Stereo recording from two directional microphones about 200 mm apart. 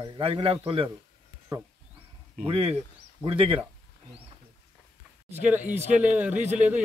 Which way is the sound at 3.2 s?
25° right (ahead or behind).